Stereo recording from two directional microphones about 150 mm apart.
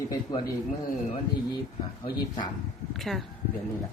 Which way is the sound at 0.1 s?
30° left (ahead or behind).